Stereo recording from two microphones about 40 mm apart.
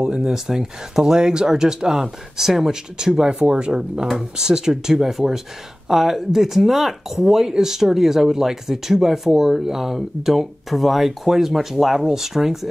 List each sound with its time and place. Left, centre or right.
0.1 s speech: centre